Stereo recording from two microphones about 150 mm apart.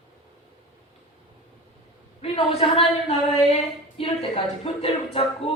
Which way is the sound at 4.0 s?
40° left (ahead or behind).